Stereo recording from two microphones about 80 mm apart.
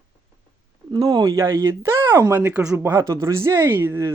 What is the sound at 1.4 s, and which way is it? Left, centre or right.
Speech, right.